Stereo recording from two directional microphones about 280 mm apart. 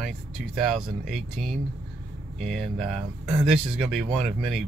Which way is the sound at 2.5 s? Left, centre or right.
Centre.